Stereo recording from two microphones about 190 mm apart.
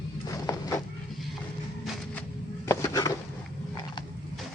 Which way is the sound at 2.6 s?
20° left (ahead or behind).